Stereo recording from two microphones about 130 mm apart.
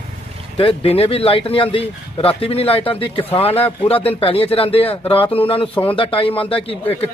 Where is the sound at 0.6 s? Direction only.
45° left (ahead or behind).